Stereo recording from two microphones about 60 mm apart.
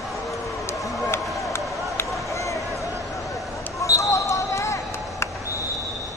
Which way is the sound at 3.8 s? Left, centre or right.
Left.